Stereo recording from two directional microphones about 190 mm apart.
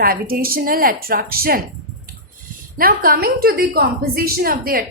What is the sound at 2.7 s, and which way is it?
A woman's voice, 50° right (ahead or behind).